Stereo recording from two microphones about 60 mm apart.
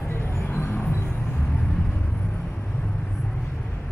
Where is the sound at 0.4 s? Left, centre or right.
Left.